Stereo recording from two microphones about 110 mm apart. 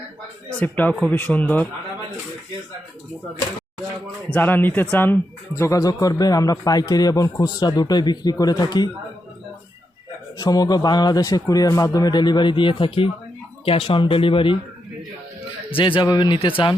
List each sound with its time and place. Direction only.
0.5 s speech: 15° left (ahead or behind)
4.3 s a man's voice: 15° left (ahead or behind); by 8.9 s 35° left (ahead or behind)
10.3 s a man's voice: 35° left (ahead or behind); by 14.6 s 50° left (ahead or behind)
15.7 s speech: 50° left (ahead or behind)